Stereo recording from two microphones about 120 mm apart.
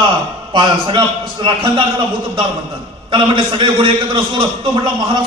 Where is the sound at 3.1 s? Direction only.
45° right (ahead or behind).